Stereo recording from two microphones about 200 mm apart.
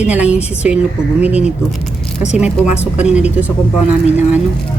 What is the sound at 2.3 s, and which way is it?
Speech, 5° right (ahead or behind).